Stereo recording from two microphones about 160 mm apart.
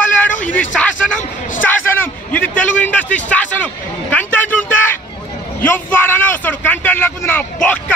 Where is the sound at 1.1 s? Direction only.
10° left (ahead or behind).